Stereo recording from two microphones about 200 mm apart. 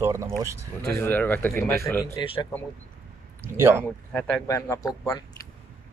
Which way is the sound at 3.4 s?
10° right (ahead or behind).